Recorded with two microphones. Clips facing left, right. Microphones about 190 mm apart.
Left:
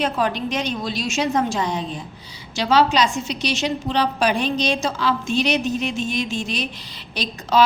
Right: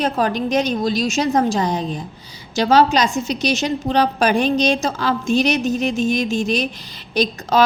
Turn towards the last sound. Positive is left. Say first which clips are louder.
# right 2 dB
turn(degrees=-45)  # may be behind; listen again after turning